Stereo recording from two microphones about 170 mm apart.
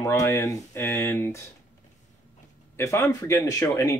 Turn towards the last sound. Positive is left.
turn(degrees=20)  # may be behind; listen again after turning